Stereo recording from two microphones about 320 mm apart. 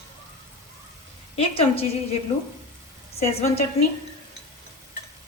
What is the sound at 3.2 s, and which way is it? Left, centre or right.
Speech, centre.